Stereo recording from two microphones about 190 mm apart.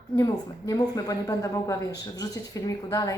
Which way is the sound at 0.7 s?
20° left (ahead or behind).